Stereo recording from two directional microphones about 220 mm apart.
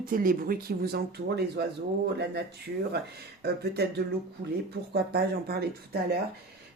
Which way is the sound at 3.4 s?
50° right (ahead or behind).